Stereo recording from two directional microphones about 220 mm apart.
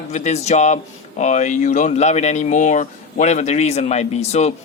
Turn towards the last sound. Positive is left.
turn(degrees=30)  # may be behind; listen again after turning